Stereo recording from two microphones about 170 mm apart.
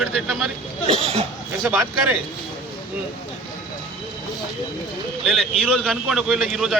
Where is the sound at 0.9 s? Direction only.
35° right (ahead or behind).